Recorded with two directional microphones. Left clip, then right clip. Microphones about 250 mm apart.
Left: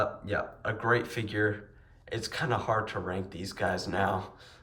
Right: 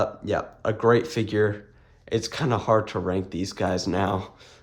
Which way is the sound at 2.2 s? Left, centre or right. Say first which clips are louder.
Right 3 dB; right.